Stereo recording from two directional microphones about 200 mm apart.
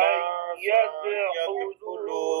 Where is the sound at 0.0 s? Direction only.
50° right (ahead or behind).